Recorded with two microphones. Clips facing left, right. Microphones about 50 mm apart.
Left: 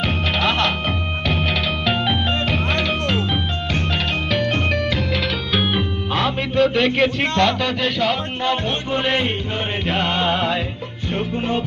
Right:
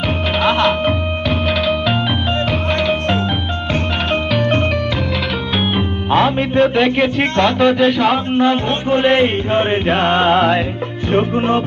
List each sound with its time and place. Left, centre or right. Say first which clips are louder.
0.4 s music: right 7 dB; centre
5.7 s music: right 6 dB; right
6.8 s speech: right 3 dB; centre
7.6 s music: right 8 dB; right
11.1 s music: right 7 dB; right